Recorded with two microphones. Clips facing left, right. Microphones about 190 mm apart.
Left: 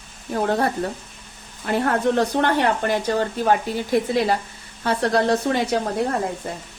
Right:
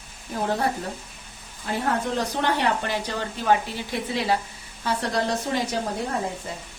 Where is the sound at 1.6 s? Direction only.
65° left (ahead or behind); by 4.4 s 45° left (ahead or behind).